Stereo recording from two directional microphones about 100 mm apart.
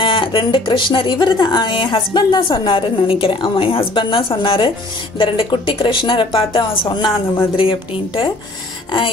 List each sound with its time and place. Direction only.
0.0 s speech: 60° left (ahead or behind)